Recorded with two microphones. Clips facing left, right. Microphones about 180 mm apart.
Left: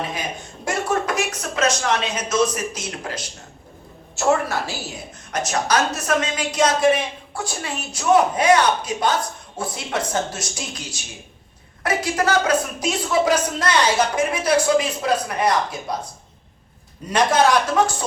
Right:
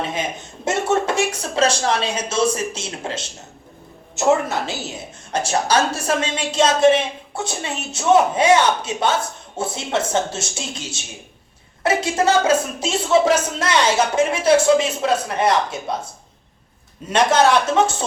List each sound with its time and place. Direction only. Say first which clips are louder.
0.1 s a woman's voice: right 3 dB; 25° right (ahead or behind)
17.1 s a woman's voice: right 2 dB; 25° right (ahead or behind)